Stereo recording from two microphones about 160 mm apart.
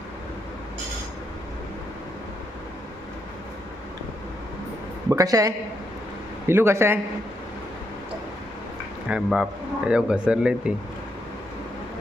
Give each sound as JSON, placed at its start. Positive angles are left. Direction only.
{"t": 5.0, "sound": "a woman's voice", "side_deg": -20}
{"t": 9.0, "sound": "speech", "side_deg": -5}